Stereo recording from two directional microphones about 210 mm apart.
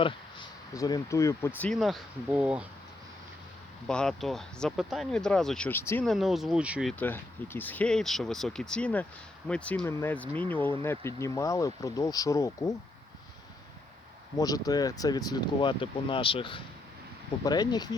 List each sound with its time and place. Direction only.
0.0 s speech: 20° left (ahead or behind); by 2.6 s 5° right (ahead or behind)
3.8 s speech: 5° left (ahead or behind)
7.0 s speech: 10° left (ahead or behind)
14.3 s speech: 15° left (ahead or behind)